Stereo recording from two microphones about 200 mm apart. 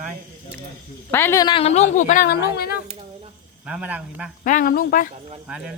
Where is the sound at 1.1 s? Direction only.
10° left (ahead or behind); by 2.8 s 50° left (ahead or behind).